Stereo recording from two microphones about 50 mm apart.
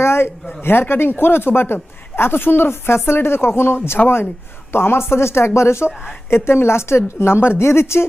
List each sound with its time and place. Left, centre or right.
0.0 s a sound: left
0.6 s speech: left
4.0 s speech: left
4.7 s a woman's voice: left